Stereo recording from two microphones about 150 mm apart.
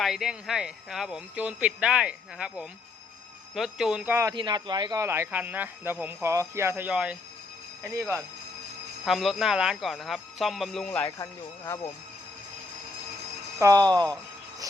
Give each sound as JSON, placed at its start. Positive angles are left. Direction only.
{"t": 0.0, "sound": "speech", "side_deg": -5}
{"t": 4.4, "sound": "speech", "side_deg": -30}
{"t": 5.0, "sound": "speech", "side_deg": -15}
{"t": 9.0, "sound": "speech", "side_deg": 0}
{"t": 11.2, "sound": "speech", "side_deg": 20}
{"t": 13.6, "sound": "speech", "side_deg": -25}